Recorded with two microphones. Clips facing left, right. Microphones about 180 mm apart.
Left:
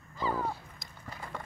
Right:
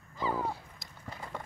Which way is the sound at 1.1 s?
20° right (ahead or behind).